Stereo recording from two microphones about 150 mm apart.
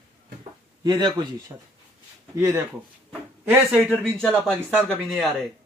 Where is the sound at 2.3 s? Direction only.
15° right (ahead or behind).